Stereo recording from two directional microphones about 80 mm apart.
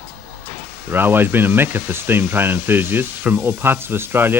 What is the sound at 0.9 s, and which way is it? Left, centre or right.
Speech, right.